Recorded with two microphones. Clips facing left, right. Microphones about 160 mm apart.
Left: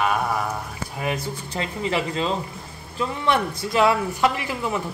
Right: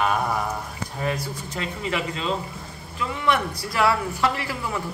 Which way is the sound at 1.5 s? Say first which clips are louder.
Left 3 dB; 30° left (ahead or behind).